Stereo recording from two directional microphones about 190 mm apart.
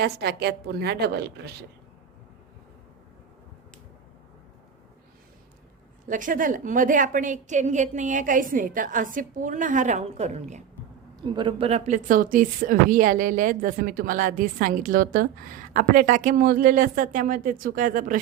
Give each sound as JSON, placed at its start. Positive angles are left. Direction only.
{"t": 0.0, "sound": "a woman's voice", "side_deg": -60}
{"t": 6.1, "sound": "a woman's voice", "side_deg": -45}
{"t": 11.2, "sound": "a woman's voice", "side_deg": -25}